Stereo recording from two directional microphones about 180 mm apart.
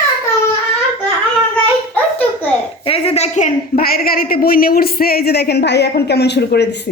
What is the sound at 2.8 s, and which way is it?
A woman's voice, 30° left (ahead or behind).